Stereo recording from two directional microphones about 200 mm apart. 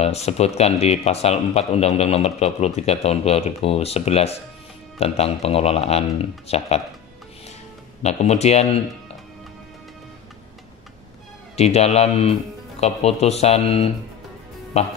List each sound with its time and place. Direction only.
0.0 s speech: 30° left (ahead or behind)
8.0 s speech: 35° left (ahead or behind)
11.5 s speech: 30° left (ahead or behind)